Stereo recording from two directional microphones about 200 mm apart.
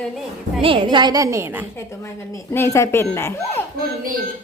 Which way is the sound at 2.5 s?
15° left (ahead or behind).